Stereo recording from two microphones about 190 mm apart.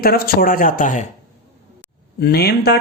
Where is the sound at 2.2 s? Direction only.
55° left (ahead or behind).